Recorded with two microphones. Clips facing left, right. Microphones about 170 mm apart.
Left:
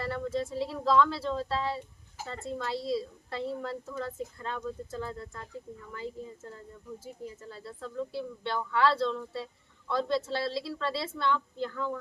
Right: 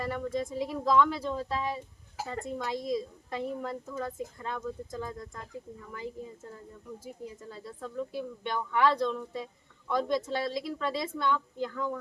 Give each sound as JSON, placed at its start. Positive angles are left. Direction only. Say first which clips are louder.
{"t": 0.0, "sound": "a woman's voice", "louder": "even", "side_deg": -15}